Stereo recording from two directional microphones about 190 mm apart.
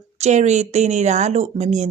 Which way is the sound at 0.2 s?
35° right (ahead or behind).